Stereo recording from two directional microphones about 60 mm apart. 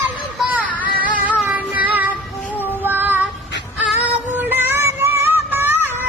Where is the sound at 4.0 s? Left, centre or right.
Right.